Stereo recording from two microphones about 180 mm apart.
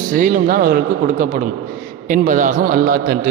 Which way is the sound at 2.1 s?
45° right (ahead or behind).